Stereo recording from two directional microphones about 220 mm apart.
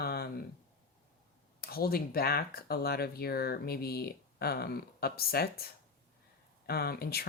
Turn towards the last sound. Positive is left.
turn(degrees=45)  # may be behind; listen again after turning